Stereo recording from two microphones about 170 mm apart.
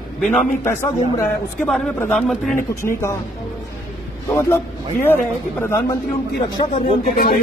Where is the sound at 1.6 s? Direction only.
5° left (ahead or behind).